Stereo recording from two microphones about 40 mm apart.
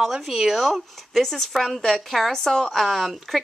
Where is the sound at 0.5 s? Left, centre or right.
Centre.